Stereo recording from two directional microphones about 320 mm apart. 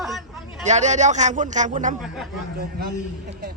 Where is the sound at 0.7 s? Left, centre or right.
Right.